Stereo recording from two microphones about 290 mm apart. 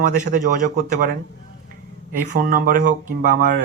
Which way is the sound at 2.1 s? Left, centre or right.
Right.